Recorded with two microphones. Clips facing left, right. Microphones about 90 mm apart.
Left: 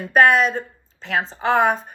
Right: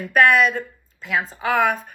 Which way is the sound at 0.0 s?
40° left (ahead or behind).